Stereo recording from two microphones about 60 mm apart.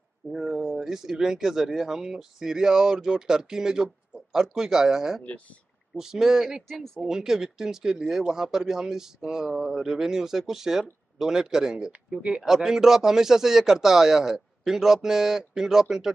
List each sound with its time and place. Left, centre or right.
0.3 s speech: centre